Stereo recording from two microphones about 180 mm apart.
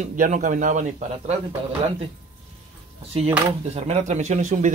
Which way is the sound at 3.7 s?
35° right (ahead or behind).